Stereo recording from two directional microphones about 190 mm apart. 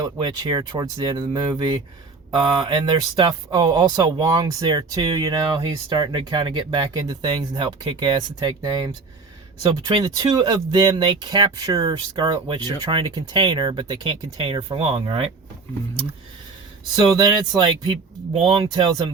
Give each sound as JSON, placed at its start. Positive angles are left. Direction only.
{"t": 0.0, "sound": "speech", "side_deg": -25}
{"t": 16.9, "sound": "speech", "side_deg": -20}